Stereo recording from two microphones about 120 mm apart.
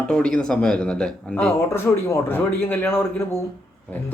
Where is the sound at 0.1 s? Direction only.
10° left (ahead or behind).